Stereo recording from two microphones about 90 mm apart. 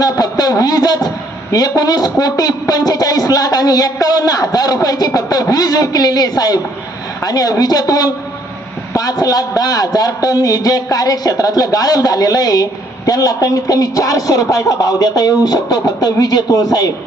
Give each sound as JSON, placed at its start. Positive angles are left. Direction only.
{"t": 0.0, "sound": "speech", "side_deg": 45}